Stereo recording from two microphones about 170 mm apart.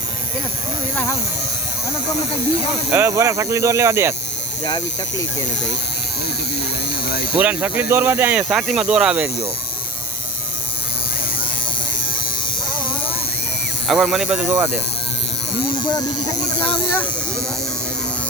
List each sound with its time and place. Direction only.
2.9 s speech: 15° right (ahead or behind)
4.6 s speech: 25° left (ahead or behind)
7.3 s speech: 10° right (ahead or behind)
13.8 s speech: centre (ahead or behind)
15.7 s speech: 25° left (ahead or behind)